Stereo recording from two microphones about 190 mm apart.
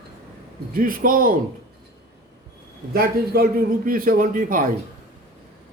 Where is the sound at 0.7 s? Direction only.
45° right (ahead or behind).